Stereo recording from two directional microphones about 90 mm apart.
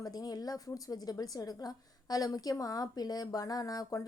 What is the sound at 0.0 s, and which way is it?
A woman's voice, 45° left (ahead or behind).